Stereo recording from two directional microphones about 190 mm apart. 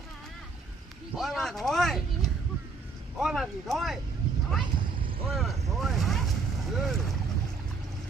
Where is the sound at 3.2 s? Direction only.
Centre (ahead or behind).